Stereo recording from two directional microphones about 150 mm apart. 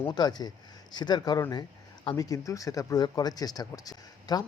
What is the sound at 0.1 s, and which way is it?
Speech, 25° left (ahead or behind).